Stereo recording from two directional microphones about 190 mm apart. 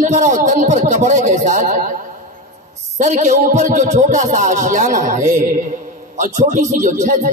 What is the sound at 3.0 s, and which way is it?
Speech, 40° right (ahead or behind).